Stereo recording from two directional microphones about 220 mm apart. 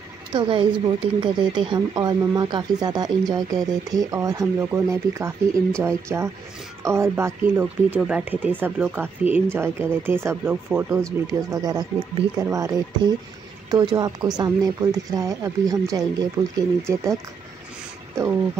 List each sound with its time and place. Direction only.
0.3 s speech: 20° right (ahead or behind)